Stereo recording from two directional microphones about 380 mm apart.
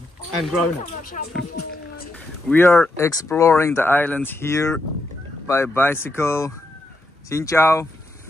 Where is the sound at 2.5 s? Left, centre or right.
Centre.